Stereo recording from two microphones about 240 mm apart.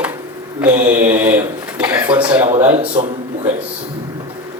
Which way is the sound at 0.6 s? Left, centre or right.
Centre.